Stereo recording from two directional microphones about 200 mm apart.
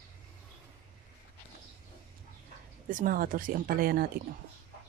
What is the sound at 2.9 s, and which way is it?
Speech, 45° right (ahead or behind).